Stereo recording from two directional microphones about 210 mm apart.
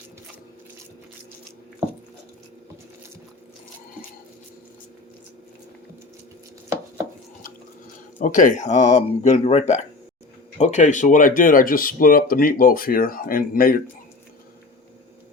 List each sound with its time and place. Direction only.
8.2 s speech: 40° left (ahead or behind)